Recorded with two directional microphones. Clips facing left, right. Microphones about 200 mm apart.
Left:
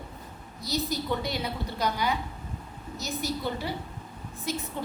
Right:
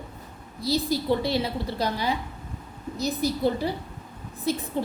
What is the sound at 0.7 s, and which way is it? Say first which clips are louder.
A woman's voice: right 5 dB; 30° right (ahead or behind).